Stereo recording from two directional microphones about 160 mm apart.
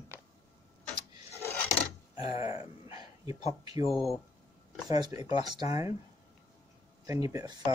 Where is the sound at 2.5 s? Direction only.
20° right (ahead or behind).